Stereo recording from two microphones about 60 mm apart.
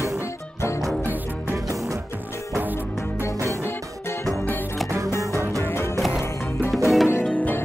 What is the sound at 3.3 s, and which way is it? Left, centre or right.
Music, right.